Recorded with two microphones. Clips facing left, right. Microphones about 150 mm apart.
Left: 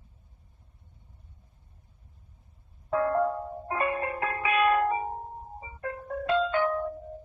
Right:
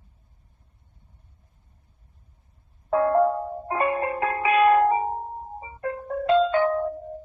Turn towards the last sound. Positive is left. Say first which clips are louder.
# right 6 dB
turn(degrees=-40)  # may be behind; listen again after turning